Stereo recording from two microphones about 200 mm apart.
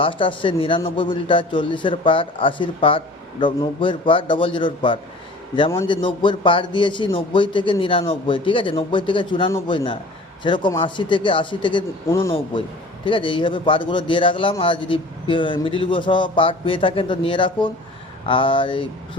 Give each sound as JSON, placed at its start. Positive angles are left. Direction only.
{"t": 0.0, "sound": "a man's voice", "side_deg": 25}
{"t": 12.0, "sound": "speech", "side_deg": 15}
{"t": 13.1, "sound": "a man's voice", "side_deg": 25}